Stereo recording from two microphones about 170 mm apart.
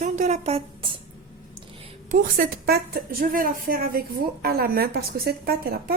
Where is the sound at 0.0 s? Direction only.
45° right (ahead or behind).